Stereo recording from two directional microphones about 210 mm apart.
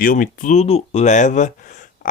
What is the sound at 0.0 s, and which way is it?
Speech, 40° left (ahead or behind).